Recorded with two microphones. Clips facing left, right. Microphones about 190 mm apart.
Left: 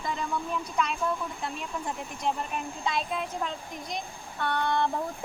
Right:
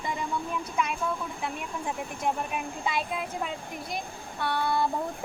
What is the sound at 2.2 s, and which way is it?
A child's voice, 10° right (ahead or behind).